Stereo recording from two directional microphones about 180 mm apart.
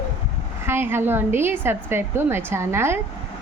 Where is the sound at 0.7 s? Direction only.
15° right (ahead or behind).